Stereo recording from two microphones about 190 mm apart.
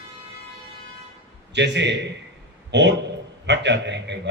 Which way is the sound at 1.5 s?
65° right (ahead or behind).